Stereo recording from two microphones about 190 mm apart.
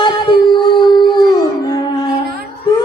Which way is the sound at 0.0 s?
25° left (ahead or behind).